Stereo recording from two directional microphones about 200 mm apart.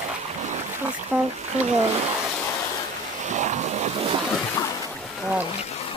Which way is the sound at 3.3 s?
35° right (ahead or behind).